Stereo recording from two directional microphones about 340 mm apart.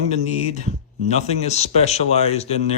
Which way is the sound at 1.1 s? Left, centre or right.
Centre.